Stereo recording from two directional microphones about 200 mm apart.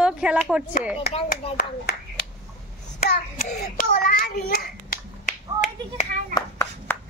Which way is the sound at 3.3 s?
50° left (ahead or behind).